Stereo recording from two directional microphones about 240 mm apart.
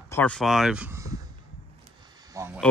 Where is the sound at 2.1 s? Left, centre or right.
Centre.